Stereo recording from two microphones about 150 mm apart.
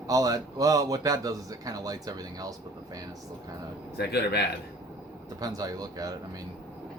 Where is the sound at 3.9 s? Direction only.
90° left.